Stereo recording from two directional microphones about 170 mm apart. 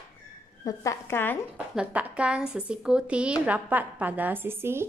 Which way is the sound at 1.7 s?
5° right (ahead or behind).